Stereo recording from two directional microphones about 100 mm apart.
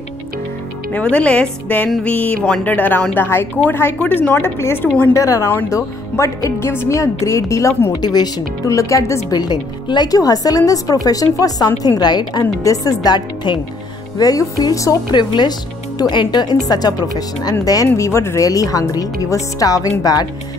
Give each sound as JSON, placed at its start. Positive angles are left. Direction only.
{"t": 0.9, "sound": "a woman's voice", "side_deg": 10}
{"t": 8.0, "sound": "speech", "side_deg": 40}
{"t": 9.3, "sound": "speech", "side_deg": 45}
{"t": 15.0, "sound": "speech", "side_deg": 50}